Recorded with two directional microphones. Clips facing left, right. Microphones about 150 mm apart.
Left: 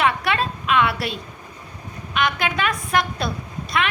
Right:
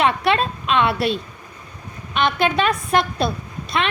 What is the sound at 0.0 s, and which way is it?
Speech, 25° right (ahead or behind).